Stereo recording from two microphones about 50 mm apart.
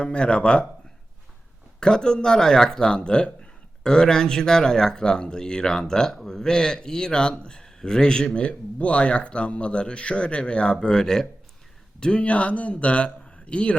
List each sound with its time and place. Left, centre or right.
0.0 s speech: left
1.8 s a man's voice: centre